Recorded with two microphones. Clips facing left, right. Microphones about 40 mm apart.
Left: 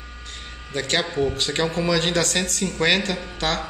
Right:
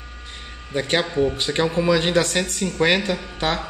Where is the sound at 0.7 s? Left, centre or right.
Centre.